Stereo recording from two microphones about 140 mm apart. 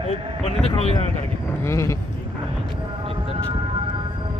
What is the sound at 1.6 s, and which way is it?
Speech, 20° left (ahead or behind).